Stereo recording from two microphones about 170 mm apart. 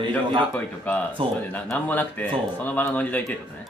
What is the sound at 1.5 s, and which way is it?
Speech, 10° left (ahead or behind).